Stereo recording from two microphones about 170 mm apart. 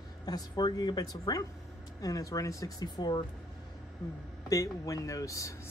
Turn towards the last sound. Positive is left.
turn(degrees=15)  # may be behind; listen again after turning